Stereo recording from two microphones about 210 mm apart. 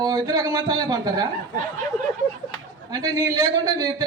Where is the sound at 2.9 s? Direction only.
15° right (ahead or behind).